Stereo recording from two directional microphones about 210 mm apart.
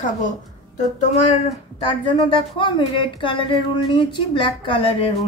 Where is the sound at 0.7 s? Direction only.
35° left (ahead or behind).